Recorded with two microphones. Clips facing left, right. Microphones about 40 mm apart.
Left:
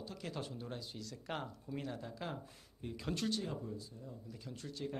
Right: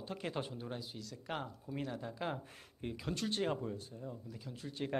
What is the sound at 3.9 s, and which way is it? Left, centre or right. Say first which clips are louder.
Speech: right 5 dB; right.